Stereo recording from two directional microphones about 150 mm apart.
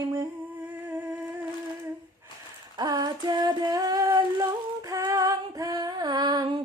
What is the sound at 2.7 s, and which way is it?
Female singing, 25° right (ahead or behind).